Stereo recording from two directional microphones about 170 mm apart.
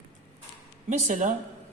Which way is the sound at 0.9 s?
45° right (ahead or behind).